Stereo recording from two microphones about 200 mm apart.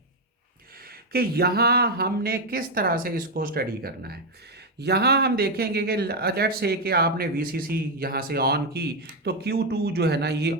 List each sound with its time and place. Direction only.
0.9 s speech: 50° right (ahead or behind)